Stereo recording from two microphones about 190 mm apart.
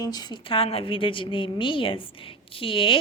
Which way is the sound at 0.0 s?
20° left (ahead or behind).